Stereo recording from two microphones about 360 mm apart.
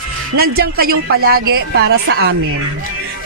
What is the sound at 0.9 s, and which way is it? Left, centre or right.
Speech, right.